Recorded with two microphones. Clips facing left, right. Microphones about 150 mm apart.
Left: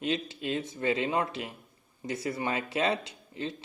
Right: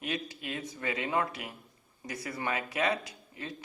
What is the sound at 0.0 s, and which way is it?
Speech, 25° left (ahead or behind).